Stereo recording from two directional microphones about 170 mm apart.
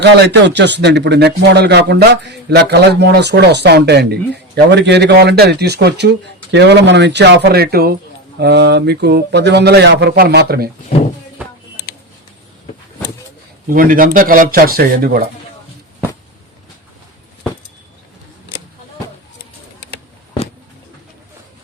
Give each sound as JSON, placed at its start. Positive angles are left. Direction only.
{"t": 0.0, "sound": "speech", "side_deg": -80}
{"t": 8.4, "sound": "speech", "side_deg": -80}
{"t": 13.7, "sound": "speech", "side_deg": -55}